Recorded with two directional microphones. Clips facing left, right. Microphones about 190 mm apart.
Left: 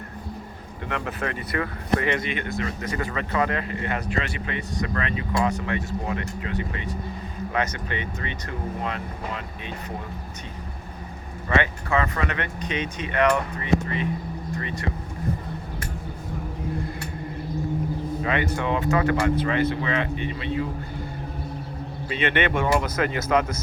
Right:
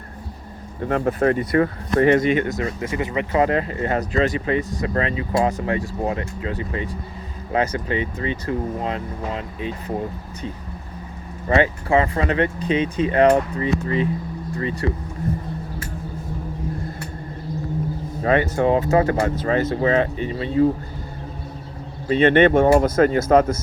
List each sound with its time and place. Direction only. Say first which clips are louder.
0.8 s speech: right 10 dB; 45° right (ahead or behind)
2.6 s speech: right 4 dB; 25° right (ahead or behind)
11.4 s speech: right 6 dB; 30° right (ahead or behind)
18.2 s speech: right 9 dB; 40° right (ahead or behind)
22.1 s speech: right 10 dB; 45° right (ahead or behind)